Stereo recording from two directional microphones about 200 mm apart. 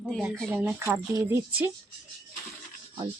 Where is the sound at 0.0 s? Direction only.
Centre (ahead or behind).